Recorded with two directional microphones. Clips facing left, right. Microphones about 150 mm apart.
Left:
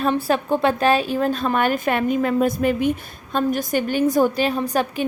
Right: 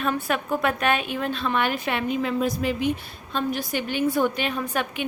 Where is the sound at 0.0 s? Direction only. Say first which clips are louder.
Left 5 dB; 35° left (ahead or behind).